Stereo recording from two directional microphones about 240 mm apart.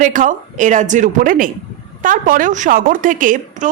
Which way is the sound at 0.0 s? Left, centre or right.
Right.